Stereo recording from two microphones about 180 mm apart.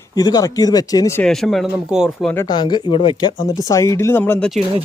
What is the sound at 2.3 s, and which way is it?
Speech, 20° left (ahead or behind).